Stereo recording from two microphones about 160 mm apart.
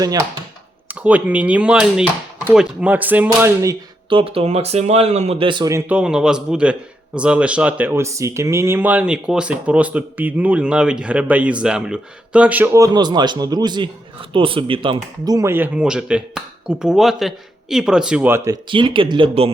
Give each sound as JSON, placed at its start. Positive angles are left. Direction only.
{"t": 0.0, "sound": "speech", "side_deg": -20}
{"t": 0.9, "sound": "speech", "side_deg": -10}
{"t": 4.1, "sound": "speech", "side_deg": -35}
{"t": 5.7, "sound": "a man's voice", "side_deg": -5}